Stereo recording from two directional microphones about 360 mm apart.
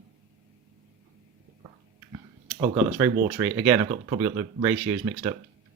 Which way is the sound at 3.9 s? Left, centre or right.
Centre.